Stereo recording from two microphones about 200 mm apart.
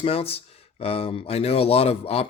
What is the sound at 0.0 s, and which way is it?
A man's voice, 30° left (ahead or behind).